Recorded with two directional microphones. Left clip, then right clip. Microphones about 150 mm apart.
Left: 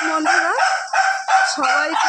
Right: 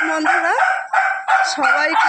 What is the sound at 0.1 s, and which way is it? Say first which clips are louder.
Chicken: left 2 dB; 5° left (ahead or behind).